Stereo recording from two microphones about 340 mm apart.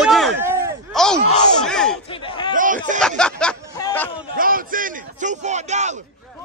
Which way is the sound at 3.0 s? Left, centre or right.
Centre.